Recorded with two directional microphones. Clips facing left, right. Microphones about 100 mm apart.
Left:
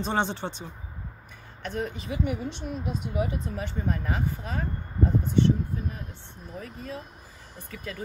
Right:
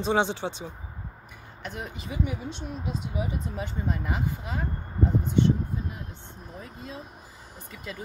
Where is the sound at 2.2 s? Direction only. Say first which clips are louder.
Left 3 dB; 55° left (ahead or behind).